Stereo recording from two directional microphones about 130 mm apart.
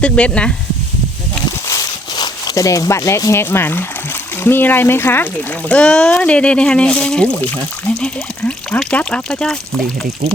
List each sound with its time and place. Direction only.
0.0 s speech: 10° left (ahead or behind)
1.6 s a sound: 30° left (ahead or behind)
4.4 s speech: 15° left (ahead or behind)